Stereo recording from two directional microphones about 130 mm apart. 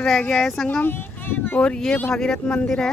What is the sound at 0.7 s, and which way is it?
Speech, 15° left (ahead or behind).